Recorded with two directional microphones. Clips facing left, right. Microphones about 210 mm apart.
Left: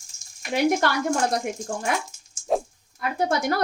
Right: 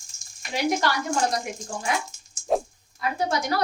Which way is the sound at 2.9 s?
50° left (ahead or behind).